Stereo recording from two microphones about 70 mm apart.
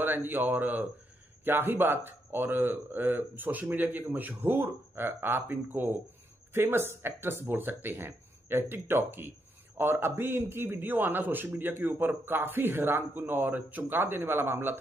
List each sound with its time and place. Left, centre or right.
0.0 s speech: right